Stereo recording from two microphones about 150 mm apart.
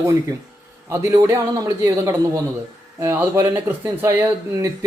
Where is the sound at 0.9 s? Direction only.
20° right (ahead or behind).